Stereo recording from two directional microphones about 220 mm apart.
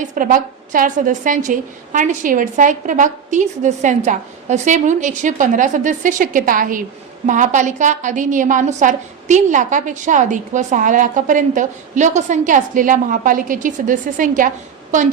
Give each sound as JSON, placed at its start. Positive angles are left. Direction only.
{"t": 0.0, "sound": "a woman's voice", "side_deg": -35}